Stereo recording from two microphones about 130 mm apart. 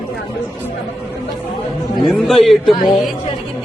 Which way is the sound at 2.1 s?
Centre (ahead or behind).